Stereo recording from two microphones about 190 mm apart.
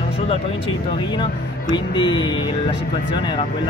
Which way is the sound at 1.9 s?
25° left (ahead or behind).